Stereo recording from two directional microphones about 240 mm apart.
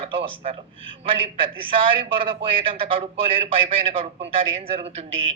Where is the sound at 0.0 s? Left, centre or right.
Right.